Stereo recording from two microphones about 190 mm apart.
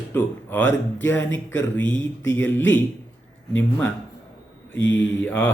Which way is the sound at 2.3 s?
10° left (ahead or behind).